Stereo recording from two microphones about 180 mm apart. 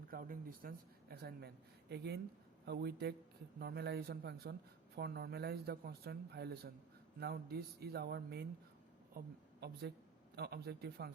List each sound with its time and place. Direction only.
0.1 s a man's voice: 50° right (ahead or behind)